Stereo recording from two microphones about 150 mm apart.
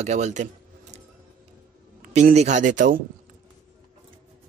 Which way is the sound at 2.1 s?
50° right (ahead or behind).